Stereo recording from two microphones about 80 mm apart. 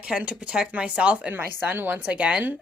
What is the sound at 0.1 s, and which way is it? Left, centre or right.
Speech, centre.